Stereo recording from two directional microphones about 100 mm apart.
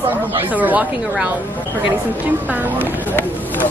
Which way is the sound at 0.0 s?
20° right (ahead or behind).